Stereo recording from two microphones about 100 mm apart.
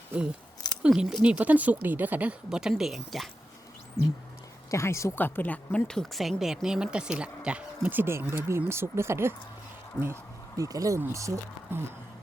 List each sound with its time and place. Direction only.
0.1 s speech: 10° right (ahead or behind)
2.5 s speech: 5° right (ahead or behind)
4.7 s speech: 30° left (ahead or behind)
5.2 s speech: 20° left (ahead or behind); by 9.3 s 25° right (ahead or behind)
10.0 s speech: 10° right (ahead or behind)
10.6 s speech: 35° right (ahead or behind)